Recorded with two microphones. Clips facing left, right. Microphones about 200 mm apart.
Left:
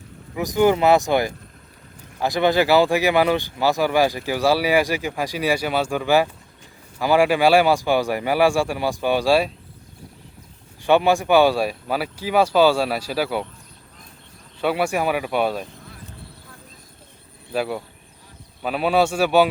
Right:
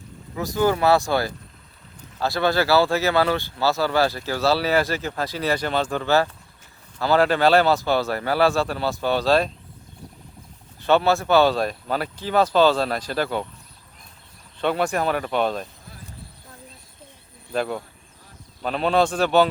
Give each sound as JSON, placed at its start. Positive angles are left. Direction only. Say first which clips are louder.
{"t": 0.3, "sound": "speech", "louder": "left 3 dB", "side_deg": 15}
{"t": 10.8, "sound": "speech", "louder": "left 2 dB", "side_deg": 15}
{"t": 14.6, "sound": "speech", "louder": "left 1 dB", "side_deg": 10}
{"t": 17.5, "sound": "speech", "louder": "left 1 dB", "side_deg": 5}